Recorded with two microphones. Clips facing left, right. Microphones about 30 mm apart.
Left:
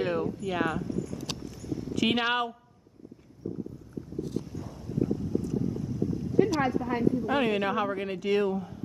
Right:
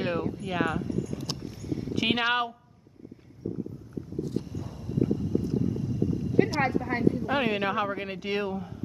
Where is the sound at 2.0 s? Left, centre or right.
Centre.